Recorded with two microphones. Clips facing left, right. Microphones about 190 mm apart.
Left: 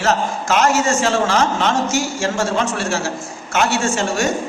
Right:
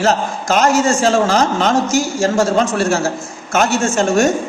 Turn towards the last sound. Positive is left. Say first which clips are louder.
# right 5 dB
turn(degrees=-45)  # may be behind; listen again after turning